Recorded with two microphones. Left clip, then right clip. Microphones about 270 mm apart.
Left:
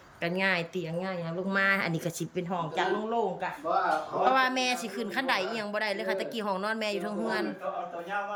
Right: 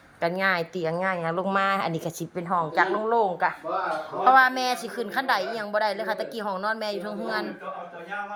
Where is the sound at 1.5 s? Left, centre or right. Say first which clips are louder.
Even; centre.